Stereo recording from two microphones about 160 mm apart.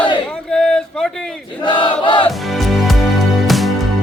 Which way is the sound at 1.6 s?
30° left (ahead or behind).